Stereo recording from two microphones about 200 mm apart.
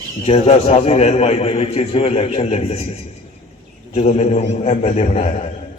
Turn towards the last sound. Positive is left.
turn(degrees=30)  # may be behind; listen again after turning